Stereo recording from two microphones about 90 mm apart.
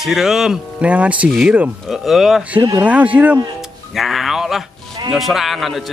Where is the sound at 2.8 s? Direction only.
15° right (ahead or behind).